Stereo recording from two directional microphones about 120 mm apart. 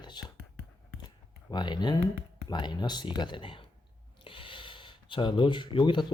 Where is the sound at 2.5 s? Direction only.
35° left (ahead or behind).